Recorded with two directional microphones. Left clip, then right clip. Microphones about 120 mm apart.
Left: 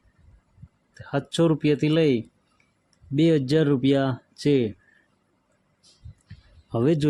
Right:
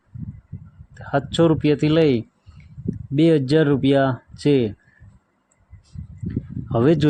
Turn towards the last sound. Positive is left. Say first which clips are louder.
# right 5 dB
turn(degrees=-30)  # may be behind; listen again after turning